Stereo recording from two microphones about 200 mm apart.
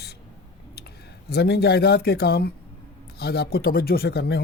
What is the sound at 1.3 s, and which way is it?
A man's voice, 55° left (ahead or behind).